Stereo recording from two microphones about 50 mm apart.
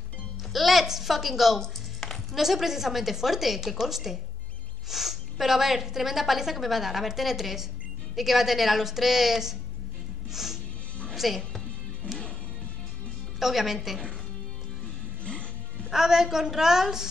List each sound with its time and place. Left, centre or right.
0.5 s a woman's voice: centre
1.6 s a sound: centre
2.4 s a woman's voice: centre
10.3 s music: centre
12.0 s music: left
13.4 s a woman's voice: centre
15.2 s music: left
15.9 s a woman's voice: centre